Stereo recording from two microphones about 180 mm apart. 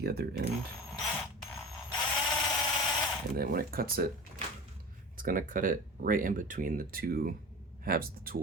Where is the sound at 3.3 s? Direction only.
55° right (ahead or behind).